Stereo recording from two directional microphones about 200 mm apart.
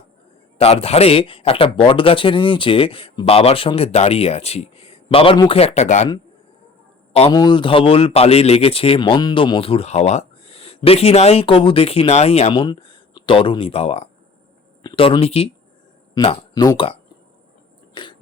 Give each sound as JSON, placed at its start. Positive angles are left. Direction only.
{"t": 0.6, "sound": "speech", "side_deg": 30}
{"t": 7.1, "sound": "speech", "side_deg": 30}
{"t": 17.9, "sound": "throat clearing", "side_deg": 25}